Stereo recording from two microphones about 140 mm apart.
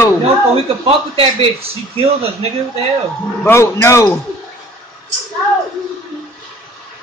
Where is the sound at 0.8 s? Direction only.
45° right (ahead or behind).